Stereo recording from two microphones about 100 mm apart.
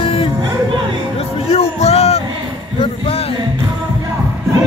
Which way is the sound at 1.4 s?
90° left.